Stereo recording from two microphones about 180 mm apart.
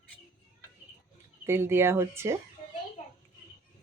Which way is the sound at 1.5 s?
15° right (ahead or behind).